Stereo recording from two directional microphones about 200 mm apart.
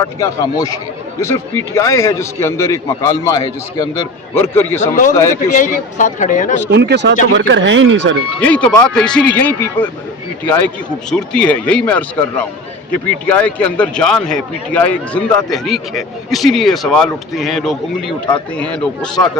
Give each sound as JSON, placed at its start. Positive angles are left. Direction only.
{"t": 0.0, "sound": "a man's voice", "side_deg": 15}
{"t": 4.4, "sound": "a man's voice", "side_deg": 10}
{"t": 5.5, "sound": "speech", "side_deg": 40}
{"t": 6.7, "sound": "speech", "side_deg": -60}
{"t": 8.4, "sound": "a man's voice", "side_deg": 5}